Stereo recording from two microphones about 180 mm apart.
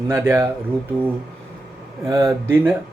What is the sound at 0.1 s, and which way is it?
Speech, 15° right (ahead or behind).